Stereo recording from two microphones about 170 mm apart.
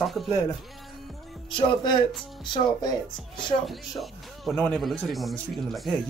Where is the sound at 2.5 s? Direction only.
20° left (ahead or behind).